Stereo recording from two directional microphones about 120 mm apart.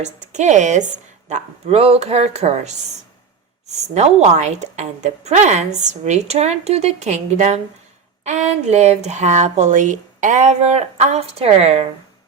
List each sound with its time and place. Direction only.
0.3 s a woman's voice: 80° right; by 11.9 s 60° right (ahead or behind)